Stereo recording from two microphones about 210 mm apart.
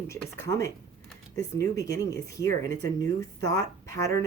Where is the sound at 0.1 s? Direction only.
15° left (ahead or behind).